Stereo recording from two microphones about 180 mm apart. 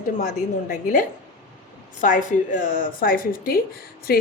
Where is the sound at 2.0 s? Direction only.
45° left (ahead or behind).